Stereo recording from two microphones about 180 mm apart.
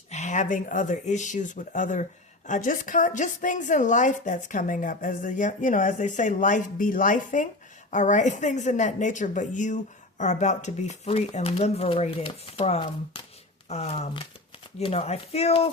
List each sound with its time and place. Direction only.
0.1 s a woman's voice: 40° left (ahead or behind)